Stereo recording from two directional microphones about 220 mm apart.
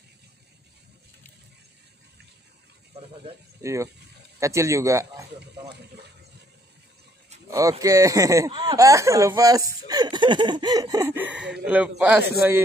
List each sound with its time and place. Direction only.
3.6 s speech: 15° right (ahead or behind)
7.4 s a man's voice: 15° right (ahead or behind)